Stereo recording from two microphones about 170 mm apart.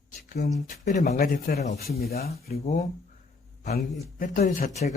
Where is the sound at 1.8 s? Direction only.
65° left (ahead or behind).